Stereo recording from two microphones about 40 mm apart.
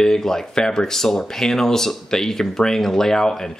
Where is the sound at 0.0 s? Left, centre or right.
Centre.